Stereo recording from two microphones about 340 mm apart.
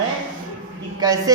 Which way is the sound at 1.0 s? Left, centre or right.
Centre.